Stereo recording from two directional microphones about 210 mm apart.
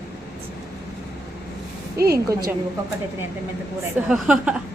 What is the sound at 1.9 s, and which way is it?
Speech, 45° right (ahead or behind).